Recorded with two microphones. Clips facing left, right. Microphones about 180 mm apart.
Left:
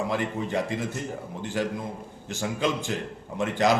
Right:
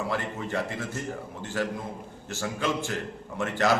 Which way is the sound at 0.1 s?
15° left (ahead or behind).